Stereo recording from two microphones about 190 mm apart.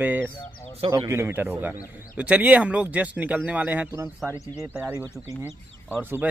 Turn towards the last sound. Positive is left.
turn(degrees=-10)  # may be behind; listen again after turning